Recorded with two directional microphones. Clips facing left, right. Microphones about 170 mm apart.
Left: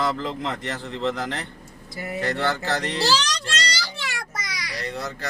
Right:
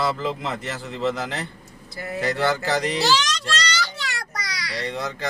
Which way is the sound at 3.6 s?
30° left (ahead or behind).